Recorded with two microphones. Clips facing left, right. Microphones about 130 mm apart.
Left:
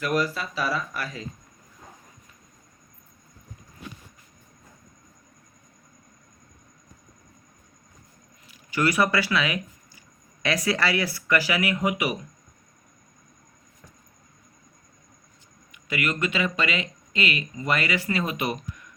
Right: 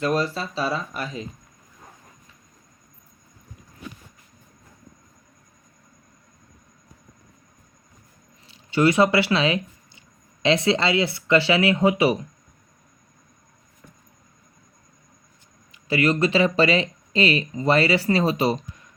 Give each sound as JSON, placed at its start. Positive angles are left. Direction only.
{"t": 0.0, "sound": "speech", "side_deg": -30}
{"t": 8.4, "sound": "speech", "side_deg": -25}
{"t": 15.7, "sound": "speech", "side_deg": -30}